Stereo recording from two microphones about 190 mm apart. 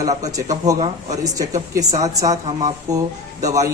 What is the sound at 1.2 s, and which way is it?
Speech, 20° right (ahead or behind).